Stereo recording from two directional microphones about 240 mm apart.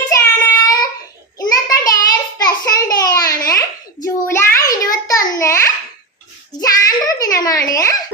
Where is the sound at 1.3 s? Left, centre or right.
Centre.